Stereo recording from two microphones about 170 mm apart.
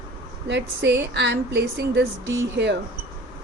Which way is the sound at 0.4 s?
85° right.